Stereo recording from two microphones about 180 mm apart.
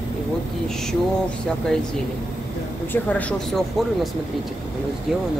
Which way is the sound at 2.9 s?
10° left (ahead or behind).